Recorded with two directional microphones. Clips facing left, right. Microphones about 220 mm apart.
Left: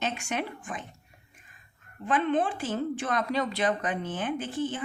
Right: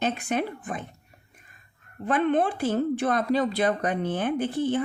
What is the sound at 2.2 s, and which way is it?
Speech, 60° right (ahead or behind).